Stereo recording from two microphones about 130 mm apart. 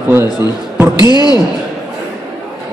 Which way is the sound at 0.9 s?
35° left (ahead or behind).